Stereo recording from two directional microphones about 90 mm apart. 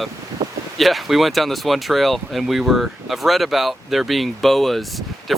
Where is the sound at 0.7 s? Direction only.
Centre (ahead or behind).